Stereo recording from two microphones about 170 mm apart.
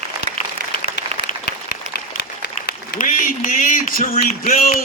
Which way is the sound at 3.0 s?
50° left (ahead or behind).